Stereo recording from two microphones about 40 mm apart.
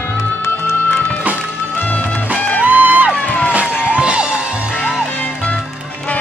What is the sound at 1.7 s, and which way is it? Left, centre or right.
Music, left.